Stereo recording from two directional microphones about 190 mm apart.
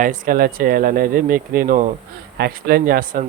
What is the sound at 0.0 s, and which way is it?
Speech, 45° right (ahead or behind).